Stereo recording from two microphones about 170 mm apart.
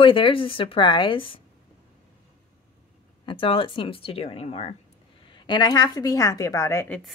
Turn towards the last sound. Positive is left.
turn(degrees=15)  # may be behind; listen again after turning